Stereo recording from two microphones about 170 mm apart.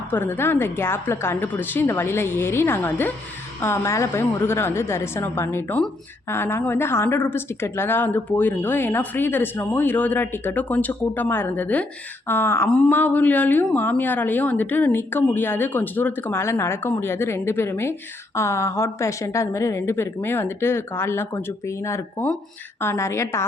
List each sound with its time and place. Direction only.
0.1 s a woman's voice: 10° left (ahead or behind)